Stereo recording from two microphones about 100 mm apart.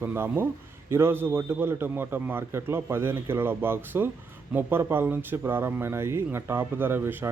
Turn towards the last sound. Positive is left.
turn(degrees=-20)  # may be behind; listen again after turning